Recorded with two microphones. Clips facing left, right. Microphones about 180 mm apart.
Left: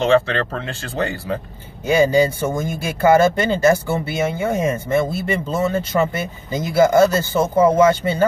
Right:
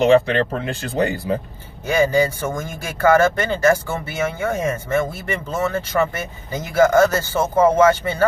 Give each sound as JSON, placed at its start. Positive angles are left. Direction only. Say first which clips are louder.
{"t": 0.0, "sound": "speech", "louder": "right 2 dB", "side_deg": -15}
{"t": 1.9, "sound": "speech", "louder": "left 2 dB", "side_deg": 15}